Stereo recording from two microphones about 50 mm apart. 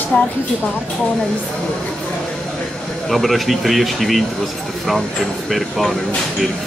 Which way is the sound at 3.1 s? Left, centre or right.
Centre.